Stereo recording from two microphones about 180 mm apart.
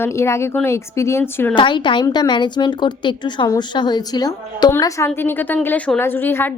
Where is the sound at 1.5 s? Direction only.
25° left (ahead or behind).